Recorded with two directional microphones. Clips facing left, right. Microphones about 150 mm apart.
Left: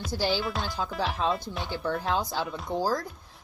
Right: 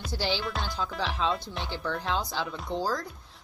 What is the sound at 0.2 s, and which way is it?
Speech, 10° left (ahead or behind).